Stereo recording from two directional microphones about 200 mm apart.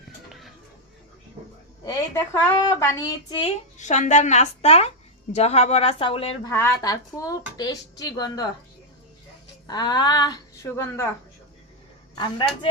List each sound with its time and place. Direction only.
0.3 s a sound: centre (ahead or behind)
1.8 s speech: 15° left (ahead or behind)
3.8 s a woman's voice: 35° left (ahead or behind)
6.5 s speech: 15° left (ahead or behind)
9.6 s speech: 20° left (ahead or behind)
12.1 s speech: 25° left (ahead or behind)